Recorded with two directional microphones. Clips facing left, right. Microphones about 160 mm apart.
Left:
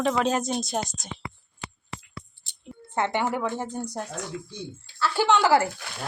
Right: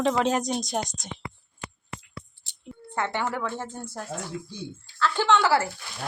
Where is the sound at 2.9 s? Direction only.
20° left (ahead or behind).